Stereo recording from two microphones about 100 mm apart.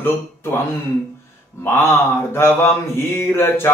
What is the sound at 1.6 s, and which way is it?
Mantra, 25° left (ahead or behind).